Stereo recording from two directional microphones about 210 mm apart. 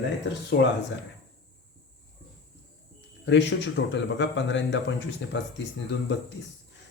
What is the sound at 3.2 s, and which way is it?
Speech, 60° left (ahead or behind).